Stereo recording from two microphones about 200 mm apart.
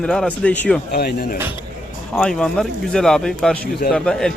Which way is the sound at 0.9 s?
50° left (ahead or behind).